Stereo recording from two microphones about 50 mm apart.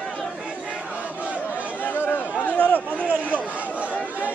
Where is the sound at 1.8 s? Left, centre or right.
Left.